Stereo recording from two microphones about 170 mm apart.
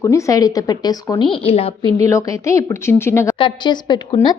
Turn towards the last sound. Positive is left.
turn(degrees=25)  # may be behind; listen again after turning